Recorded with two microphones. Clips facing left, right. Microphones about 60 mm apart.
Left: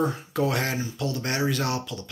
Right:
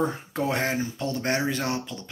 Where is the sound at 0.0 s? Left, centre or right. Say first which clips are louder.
Left 1 dB; right.